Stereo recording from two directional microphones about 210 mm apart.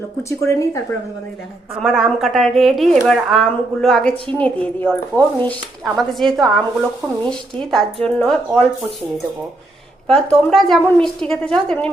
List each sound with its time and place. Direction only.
0.2 s speech: 15° left (ahead or behind)
1.8 s a woman's voice: 5° right (ahead or behind)
10.2 s a woman's voice: centre (ahead or behind)